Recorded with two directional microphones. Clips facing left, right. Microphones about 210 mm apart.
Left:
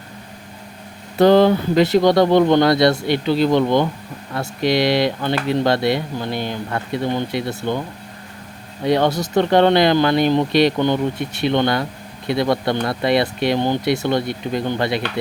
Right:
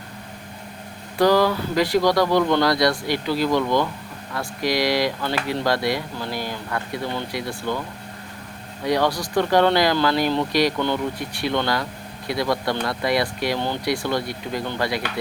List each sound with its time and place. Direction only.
1.2 s speech: 25° left (ahead or behind)
8.8 s speech: 25° left (ahead or behind)